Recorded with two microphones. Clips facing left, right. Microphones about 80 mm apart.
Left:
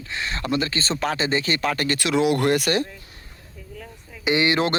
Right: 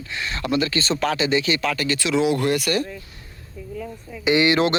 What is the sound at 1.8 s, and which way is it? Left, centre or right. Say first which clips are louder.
Speech: even; left.